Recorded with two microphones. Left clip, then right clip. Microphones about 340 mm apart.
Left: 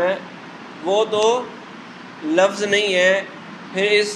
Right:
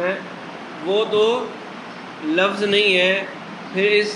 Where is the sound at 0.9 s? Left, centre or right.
Centre.